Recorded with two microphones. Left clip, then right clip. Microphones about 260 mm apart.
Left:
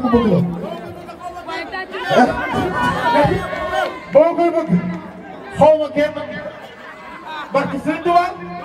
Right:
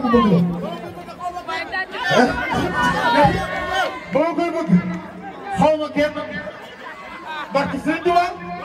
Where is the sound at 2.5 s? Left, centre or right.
Right.